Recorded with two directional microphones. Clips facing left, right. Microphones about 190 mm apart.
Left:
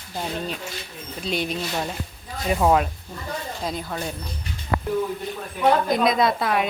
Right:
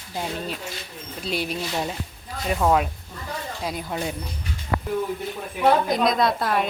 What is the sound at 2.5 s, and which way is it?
Speech, 5° left (ahead or behind).